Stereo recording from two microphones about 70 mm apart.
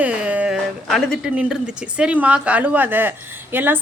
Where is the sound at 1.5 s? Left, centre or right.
Centre.